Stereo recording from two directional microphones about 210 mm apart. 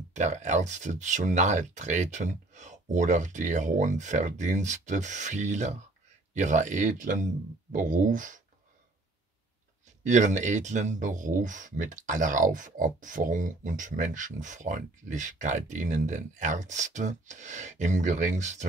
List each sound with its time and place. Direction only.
0.1 s speech: 35° right (ahead or behind)
10.0 s speech: 35° right (ahead or behind)